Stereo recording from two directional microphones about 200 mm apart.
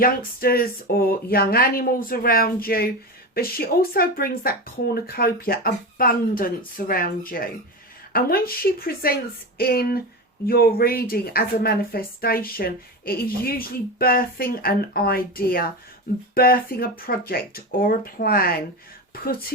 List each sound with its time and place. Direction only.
0.0 s speech: 50° left (ahead or behind)